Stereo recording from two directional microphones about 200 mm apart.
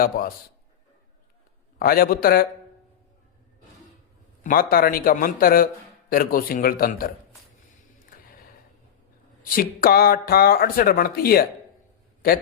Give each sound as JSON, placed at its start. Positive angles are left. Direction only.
{"t": 0.1, "sound": "speech", "side_deg": 50}
{"t": 1.8, "sound": "speech", "side_deg": 50}
{"t": 4.4, "sound": "speech", "side_deg": 45}
{"t": 9.4, "sound": "speech", "side_deg": 45}